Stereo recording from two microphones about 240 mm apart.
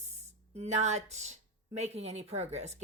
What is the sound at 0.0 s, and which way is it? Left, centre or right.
A woman's voice, right.